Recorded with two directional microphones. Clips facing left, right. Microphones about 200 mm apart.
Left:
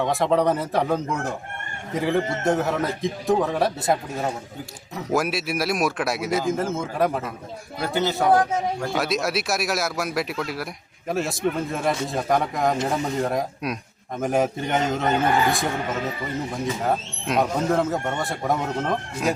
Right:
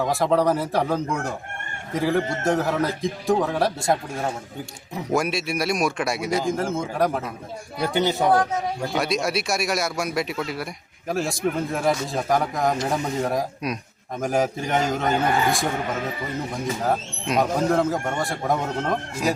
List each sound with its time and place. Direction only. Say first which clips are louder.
0.0 s a man's voice: even; centre (ahead or behind)
7.8 s speech: right 2 dB; 15° right (ahead or behind)
8.9 s a man's voice: right 2 dB; centre (ahead or behind)
16.8 s a man's voice: even; centre (ahead or behind)